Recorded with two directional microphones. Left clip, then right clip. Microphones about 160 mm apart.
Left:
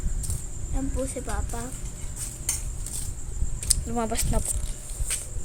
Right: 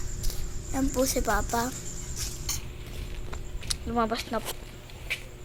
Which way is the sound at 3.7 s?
15° left (ahead or behind).